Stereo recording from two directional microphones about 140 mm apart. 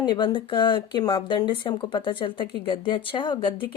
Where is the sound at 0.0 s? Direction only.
30° left (ahead or behind).